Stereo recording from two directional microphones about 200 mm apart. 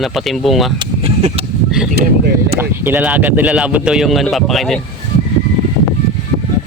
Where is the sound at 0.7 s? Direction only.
25° right (ahead or behind).